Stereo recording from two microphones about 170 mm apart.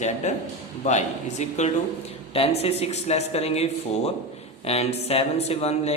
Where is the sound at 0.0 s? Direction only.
45° left (ahead or behind).